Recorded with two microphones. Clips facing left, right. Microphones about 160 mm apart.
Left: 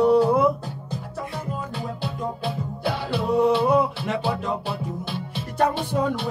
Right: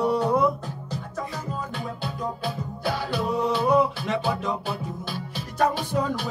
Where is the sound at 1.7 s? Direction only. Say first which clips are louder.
Left 2 dB; 30° left (ahead or behind).